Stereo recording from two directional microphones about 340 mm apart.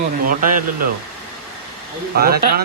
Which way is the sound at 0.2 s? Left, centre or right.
Right.